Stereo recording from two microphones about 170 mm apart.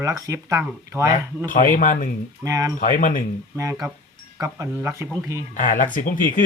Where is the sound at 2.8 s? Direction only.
55° left (ahead or behind).